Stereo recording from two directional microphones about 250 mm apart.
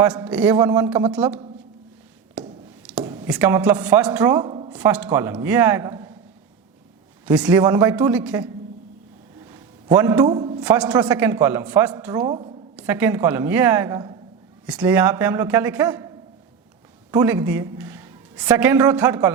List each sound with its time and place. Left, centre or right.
0.0 s speech: centre
2.4 s a sound: centre
3.0 s speech: centre
4.7 s speech: centre
7.3 s speech: centre
9.4 s a sound: centre
10.6 s speech: centre
12.3 s a woman's voice: right
12.7 s a woman's voice: centre